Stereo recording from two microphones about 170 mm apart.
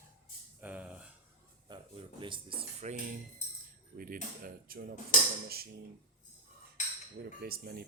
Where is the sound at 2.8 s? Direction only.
45° right (ahead or behind).